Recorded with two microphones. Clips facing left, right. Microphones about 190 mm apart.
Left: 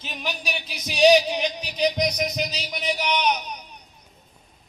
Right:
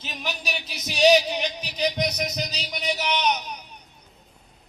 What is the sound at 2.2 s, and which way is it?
Speech, 5° left (ahead or behind).